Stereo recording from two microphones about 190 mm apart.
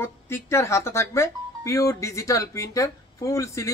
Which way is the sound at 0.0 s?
15° left (ahead or behind).